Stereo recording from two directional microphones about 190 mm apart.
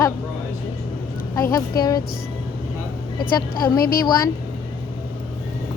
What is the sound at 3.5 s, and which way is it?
Speech, 50° left (ahead or behind).